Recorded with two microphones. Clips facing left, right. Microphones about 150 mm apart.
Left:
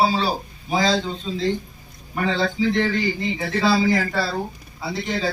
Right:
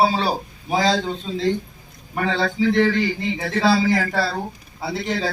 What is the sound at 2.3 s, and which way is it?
Speech, 65° right (ahead or behind).